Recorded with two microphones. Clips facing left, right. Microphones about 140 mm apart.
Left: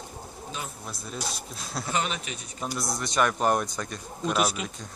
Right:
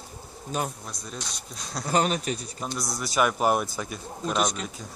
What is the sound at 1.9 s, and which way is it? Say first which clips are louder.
Speech: right 6 dB; 40° right (ahead or behind).